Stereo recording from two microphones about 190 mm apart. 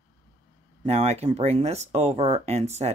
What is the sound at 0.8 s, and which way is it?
Speech, 35° right (ahead or behind).